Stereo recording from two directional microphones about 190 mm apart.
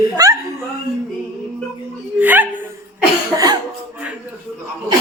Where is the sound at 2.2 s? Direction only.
10° right (ahead or behind).